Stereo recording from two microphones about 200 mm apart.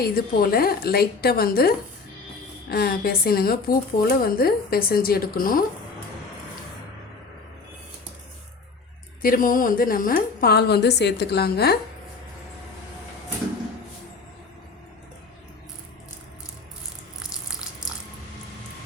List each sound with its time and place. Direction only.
0.0 s speech: 50° left (ahead or behind)
9.2 s speech: 45° left (ahead or behind)